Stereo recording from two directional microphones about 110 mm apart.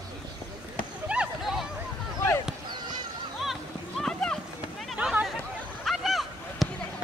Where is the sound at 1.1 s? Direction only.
5° right (ahead or behind).